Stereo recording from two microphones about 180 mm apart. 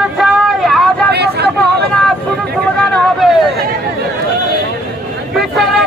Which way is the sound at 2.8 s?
5° left (ahead or behind).